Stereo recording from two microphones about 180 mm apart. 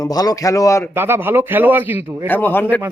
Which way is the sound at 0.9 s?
10° right (ahead or behind).